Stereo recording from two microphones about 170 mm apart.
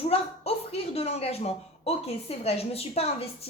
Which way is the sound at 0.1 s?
35° left (ahead or behind).